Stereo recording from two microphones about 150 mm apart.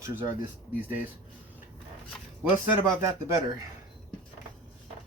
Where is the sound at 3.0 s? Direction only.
20° right (ahead or behind).